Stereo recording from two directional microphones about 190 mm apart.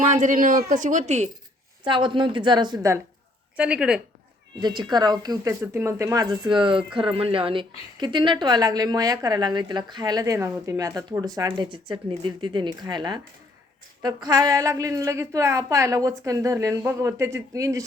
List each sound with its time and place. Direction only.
0.0 s speech: 40° right (ahead or behind)
1.8 s a woman's voice: 25° right (ahead or behind)
3.6 s speech: 5° right (ahead or behind)
4.6 s a woman's voice: 25° right (ahead or behind)